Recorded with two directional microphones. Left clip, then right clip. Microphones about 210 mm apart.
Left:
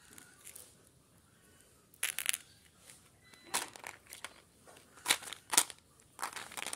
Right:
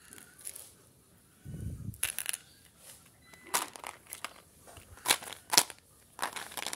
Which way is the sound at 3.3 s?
15° right (ahead or behind).